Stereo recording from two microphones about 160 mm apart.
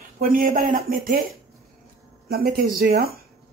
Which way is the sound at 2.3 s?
75° right (ahead or behind).